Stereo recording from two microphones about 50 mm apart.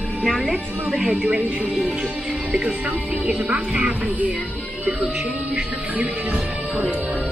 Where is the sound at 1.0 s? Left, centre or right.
Right.